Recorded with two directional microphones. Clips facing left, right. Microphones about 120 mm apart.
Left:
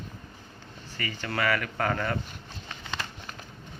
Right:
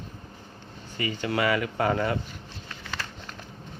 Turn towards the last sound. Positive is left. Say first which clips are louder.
# even
turn(degrees=20)  # may be behind; listen again after turning